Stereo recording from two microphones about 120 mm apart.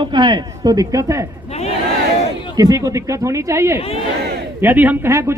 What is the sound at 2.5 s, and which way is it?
A man's voice, 30° right (ahead or behind).